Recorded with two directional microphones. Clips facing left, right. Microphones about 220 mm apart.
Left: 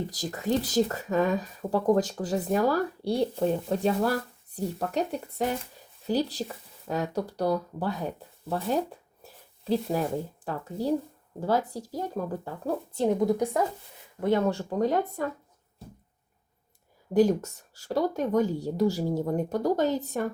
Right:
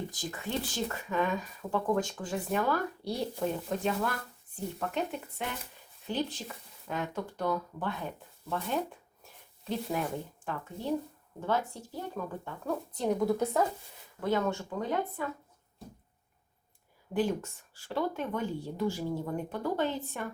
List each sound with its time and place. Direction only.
0.1 s speech: 40° left (ahead or behind)
13.1 s a woman's voice: 15° left (ahead or behind)
14.2 s speech: 25° left (ahead or behind)
17.2 s speech: 40° left (ahead or behind)